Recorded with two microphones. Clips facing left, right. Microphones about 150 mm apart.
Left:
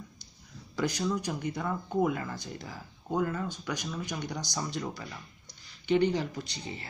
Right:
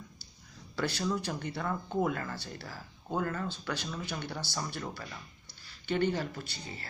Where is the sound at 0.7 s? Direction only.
15° left (ahead or behind).